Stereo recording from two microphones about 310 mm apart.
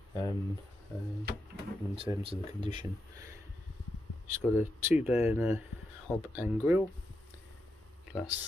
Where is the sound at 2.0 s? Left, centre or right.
Centre.